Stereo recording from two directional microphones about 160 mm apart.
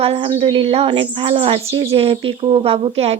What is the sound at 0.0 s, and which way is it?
Speech, 40° right (ahead or behind).